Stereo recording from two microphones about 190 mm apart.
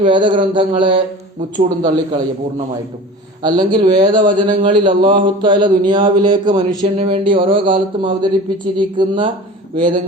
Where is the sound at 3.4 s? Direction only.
25° right (ahead or behind).